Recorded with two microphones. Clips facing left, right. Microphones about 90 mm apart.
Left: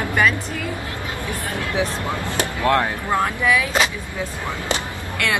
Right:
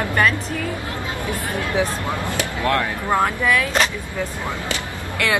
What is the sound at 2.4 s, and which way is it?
Speech, 25° left (ahead or behind).